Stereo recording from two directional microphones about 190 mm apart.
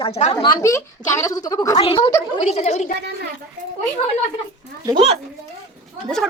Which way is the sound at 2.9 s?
60° right (ahead or behind).